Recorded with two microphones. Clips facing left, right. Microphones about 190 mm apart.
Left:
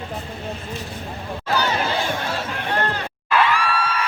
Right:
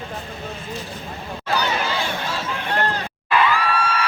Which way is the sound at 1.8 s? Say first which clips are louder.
Left 2 dB; 50° left (ahead or behind).